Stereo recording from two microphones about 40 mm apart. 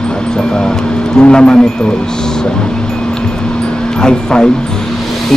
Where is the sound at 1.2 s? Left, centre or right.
Left.